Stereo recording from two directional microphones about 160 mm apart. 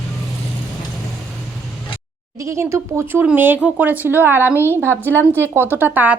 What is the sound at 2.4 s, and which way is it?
Speech, 15° right (ahead or behind).